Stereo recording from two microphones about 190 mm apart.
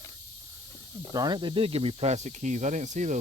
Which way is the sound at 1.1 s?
20° right (ahead or behind).